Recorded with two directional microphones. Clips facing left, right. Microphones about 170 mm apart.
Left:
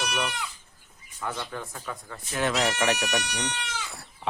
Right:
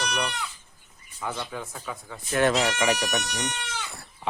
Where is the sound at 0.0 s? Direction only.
5° left (ahead or behind).